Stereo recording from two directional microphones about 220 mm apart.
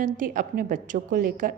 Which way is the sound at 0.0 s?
40° right (ahead or behind).